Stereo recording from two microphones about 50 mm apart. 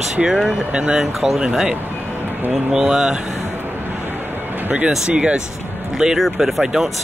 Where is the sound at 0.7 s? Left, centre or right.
Right.